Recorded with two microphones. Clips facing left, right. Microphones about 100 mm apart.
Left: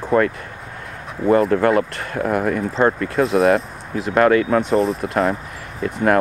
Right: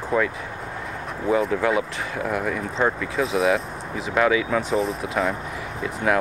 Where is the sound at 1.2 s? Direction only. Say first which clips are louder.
Left 6 dB; centre (ahead or behind).